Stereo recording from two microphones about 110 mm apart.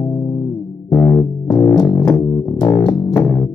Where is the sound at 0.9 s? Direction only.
20° left (ahead or behind).